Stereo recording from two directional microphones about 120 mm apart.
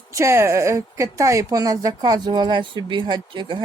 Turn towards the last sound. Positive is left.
turn(degrees=-40)  # may be behind; listen again after turning